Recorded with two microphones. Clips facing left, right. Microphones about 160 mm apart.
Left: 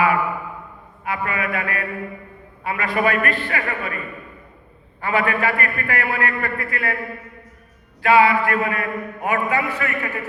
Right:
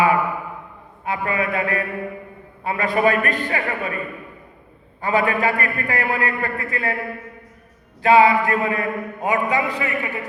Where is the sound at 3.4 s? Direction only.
15° right (ahead or behind).